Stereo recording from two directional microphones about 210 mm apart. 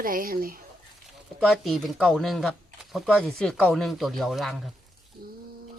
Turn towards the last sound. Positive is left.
turn(degrees=0)  # may be behind; listen again after turning